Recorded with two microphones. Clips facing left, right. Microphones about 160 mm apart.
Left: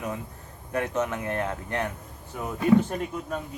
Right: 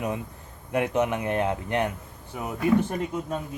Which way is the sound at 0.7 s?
15° right (ahead or behind).